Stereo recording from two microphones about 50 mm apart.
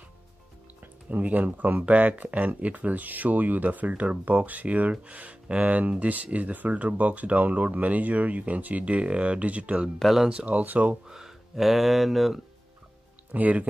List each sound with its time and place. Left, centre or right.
1.1 s speech: right
9.9 s speech: centre
10.3 s speech: right
11.1 s speech: centre
13.3 s speech: right